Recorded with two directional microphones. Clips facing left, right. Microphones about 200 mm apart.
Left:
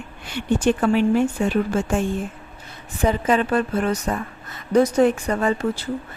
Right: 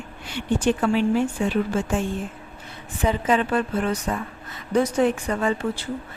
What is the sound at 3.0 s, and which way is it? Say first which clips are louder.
A woman's voice: left 2 dB; 45° left (ahead or behind).